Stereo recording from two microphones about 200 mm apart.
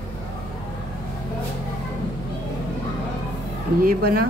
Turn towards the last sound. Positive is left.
turn(degrees=-45)  # may be behind; listen again after turning